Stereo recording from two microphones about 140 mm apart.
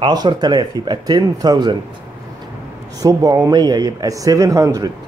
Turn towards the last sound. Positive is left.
turn(degrees=-25)  # may be behind; listen again after turning